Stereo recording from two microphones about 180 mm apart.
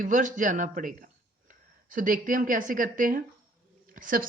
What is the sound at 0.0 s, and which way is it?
A man's voice, 45° right (ahead or behind).